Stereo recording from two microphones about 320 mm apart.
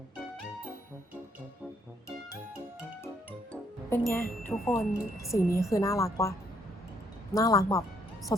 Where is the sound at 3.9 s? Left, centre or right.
Centre.